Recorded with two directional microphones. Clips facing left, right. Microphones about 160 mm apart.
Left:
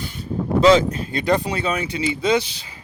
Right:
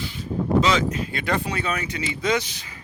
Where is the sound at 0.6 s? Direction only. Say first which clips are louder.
Left 7 dB; 35° left (ahead or behind).